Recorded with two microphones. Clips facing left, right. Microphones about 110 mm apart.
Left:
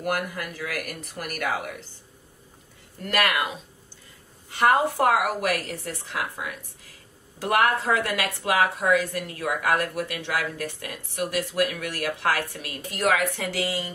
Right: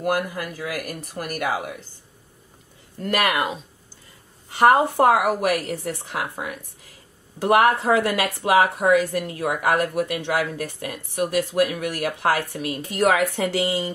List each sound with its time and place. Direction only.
0.0 s speech: 20° right (ahead or behind)
0.4 s speech: 30° right (ahead or behind)
1.4 s speech: 20° right (ahead or behind)
3.1 s speech: 25° right (ahead or behind)
4.7 s speech: 30° right (ahead or behind)
5.5 s speech: 20° right (ahead or behind)
7.3 s speech: 25° right (ahead or behind)